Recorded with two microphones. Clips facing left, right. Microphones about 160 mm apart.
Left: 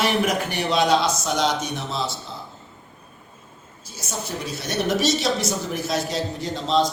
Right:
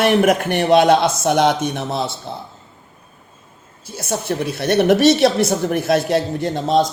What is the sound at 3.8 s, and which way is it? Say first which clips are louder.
A man's voice: right 9 dB; 60° right (ahead or behind).